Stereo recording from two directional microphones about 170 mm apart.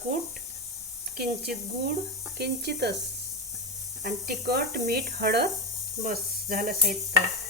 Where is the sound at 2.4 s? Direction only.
75° right (ahead or behind).